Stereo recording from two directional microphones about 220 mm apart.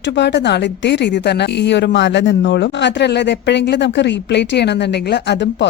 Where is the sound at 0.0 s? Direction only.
50° left (ahead or behind).